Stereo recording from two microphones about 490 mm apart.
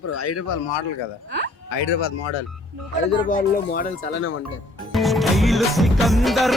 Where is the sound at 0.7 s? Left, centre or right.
Left.